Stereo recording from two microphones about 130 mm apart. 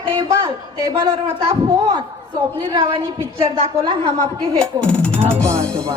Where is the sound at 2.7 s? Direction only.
35° right (ahead or behind).